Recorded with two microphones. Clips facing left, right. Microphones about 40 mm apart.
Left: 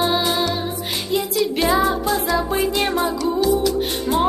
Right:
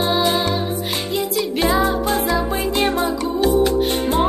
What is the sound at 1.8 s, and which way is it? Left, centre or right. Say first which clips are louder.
Music: right 1 dB; right.